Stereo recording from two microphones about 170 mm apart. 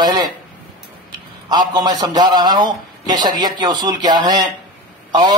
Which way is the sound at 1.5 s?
25° right (ahead or behind).